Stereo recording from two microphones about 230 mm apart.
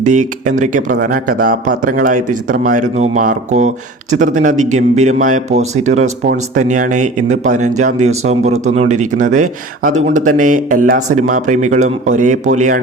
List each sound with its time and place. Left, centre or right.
0.0 s speech: right